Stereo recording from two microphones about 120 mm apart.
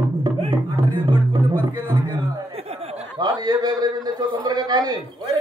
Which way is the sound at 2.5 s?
55° right (ahead or behind).